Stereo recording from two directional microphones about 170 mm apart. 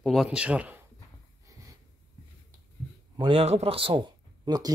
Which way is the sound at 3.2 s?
35° right (ahead or behind).